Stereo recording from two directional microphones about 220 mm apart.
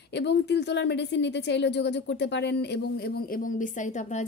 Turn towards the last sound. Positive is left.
turn(degrees=35)  # may be behind; listen again after turning